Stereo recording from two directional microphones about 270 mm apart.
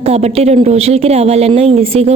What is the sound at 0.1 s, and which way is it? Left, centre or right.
A woman's voice, right.